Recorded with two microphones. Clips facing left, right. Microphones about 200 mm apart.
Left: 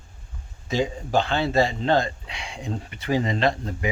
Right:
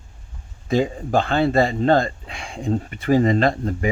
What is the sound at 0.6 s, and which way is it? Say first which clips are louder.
Speech: right 5 dB; 55° right (ahead or behind).